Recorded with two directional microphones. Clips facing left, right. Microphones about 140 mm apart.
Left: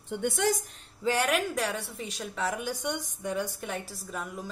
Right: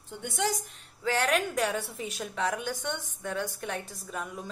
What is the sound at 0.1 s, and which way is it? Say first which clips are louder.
Speech: left 4 dB; 55° left (ahead or behind).